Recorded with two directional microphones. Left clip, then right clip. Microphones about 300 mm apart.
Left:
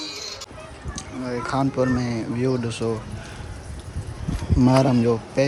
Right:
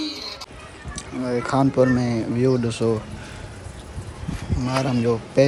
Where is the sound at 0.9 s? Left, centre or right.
Centre.